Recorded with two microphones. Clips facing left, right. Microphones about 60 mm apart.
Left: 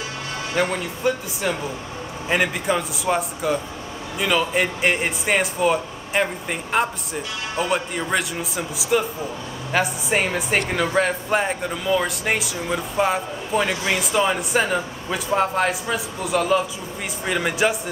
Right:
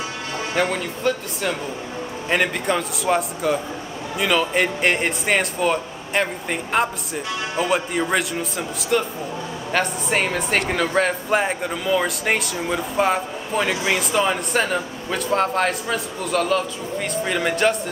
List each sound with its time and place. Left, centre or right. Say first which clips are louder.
0.6 s speech: even; centre